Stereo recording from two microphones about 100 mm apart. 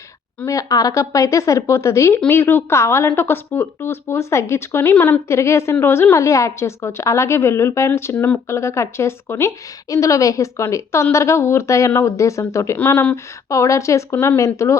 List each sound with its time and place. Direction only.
0.4 s speech: 35° left (ahead or behind); by 5.2 s 15° left (ahead or behind)
5.3 s a woman's voice: 30° left (ahead or behind)
13.5 s a woman's voice: 30° left (ahead or behind)